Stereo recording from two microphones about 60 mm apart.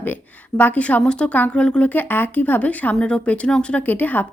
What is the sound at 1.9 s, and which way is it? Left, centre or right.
A woman's voice, left.